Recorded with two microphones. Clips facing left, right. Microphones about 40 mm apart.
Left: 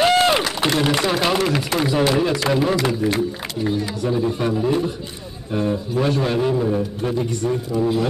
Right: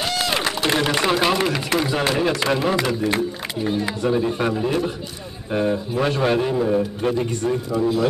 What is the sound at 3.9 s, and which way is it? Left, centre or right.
Speech, right.